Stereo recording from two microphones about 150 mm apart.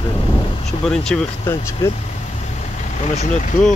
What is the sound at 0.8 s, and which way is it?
Speech, 5° left (ahead or behind).